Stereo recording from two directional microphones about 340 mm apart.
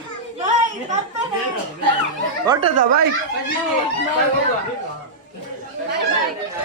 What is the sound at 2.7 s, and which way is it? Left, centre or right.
Speech, right.